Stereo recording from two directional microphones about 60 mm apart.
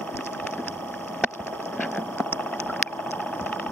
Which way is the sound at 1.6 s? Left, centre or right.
Left.